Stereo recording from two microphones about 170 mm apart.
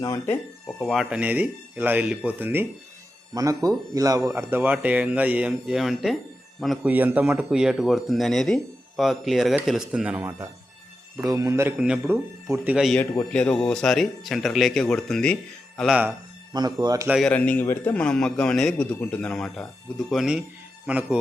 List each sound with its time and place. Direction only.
0.8 s speech: centre (ahead or behind)
11.3 s speech: 20° right (ahead or behind); by 16.0 s centre (ahead or behind)
16.0 s speech: 25° right (ahead or behind)
17.1 s a man's voice: centre (ahead or behind)